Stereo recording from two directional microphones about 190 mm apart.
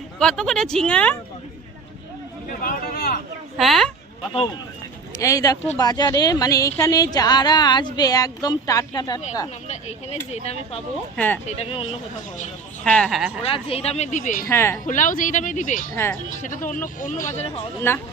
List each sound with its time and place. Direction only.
0.2 s speech: 5° left (ahead or behind)
2.5 s speech: 50° left (ahead or behind)
3.6 s speech: centre (ahead or behind)
5.1 s a woman's voice: 15° left (ahead or behind)
9.6 s a woman's voice: 35° left (ahead or behind)
12.8 s speech: 5° left (ahead or behind)
13.4 s speech: 30° left (ahead or behind)
14.4 s speech: 15° left (ahead or behind)
14.8 s speech: 45° left (ahead or behind)
17.3 s speech: 35° left (ahead or behind)
17.9 s speech: 10° left (ahead or behind)